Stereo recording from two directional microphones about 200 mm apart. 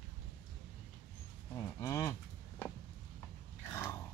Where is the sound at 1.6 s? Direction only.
15° left (ahead or behind).